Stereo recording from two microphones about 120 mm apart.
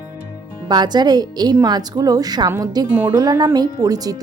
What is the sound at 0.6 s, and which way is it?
A woman's voice, 35° right (ahead or behind).